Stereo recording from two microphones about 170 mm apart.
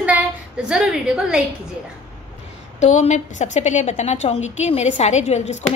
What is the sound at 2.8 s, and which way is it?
A woman's voice, 40° left (ahead or behind).